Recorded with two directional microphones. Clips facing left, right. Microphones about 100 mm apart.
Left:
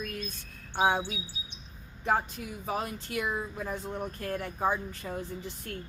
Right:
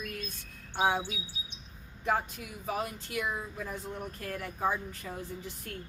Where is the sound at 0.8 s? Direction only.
25° left (ahead or behind).